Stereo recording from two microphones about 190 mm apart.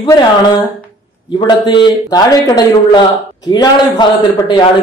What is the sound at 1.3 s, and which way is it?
A man's voice, 20° left (ahead or behind).